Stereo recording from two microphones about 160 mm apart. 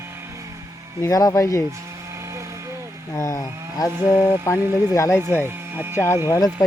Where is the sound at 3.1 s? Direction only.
20° left (ahead or behind).